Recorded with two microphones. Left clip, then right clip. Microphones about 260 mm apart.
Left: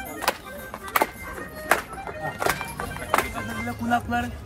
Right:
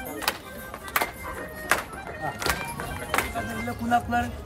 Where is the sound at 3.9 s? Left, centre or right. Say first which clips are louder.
Right 1 dB; centre.